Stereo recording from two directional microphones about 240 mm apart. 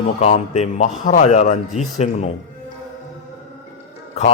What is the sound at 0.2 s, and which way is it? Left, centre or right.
A man's voice, left.